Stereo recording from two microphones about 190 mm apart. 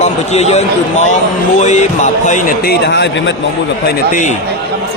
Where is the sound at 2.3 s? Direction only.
55° left (ahead or behind); by 3.3 s 70° left (ahead or behind).